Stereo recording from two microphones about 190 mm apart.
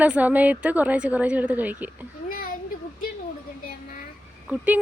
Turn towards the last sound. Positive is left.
turn(degrees=-5)  # may be behind; listen again after turning